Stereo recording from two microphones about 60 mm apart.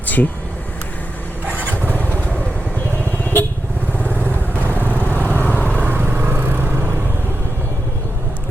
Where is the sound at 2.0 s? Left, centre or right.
Left.